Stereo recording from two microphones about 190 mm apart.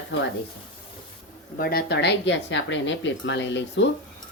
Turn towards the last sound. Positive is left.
turn(degrees=70)  # may be behind; listen again after turning